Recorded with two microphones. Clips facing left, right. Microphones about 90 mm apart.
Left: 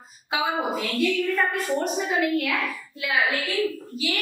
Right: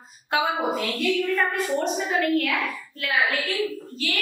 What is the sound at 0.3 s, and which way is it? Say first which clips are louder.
A woman's voice: right 2 dB; centre (ahead or behind).